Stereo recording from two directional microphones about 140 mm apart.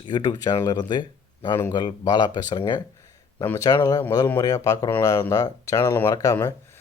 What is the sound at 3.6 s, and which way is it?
Speech, 30° left (ahead or behind).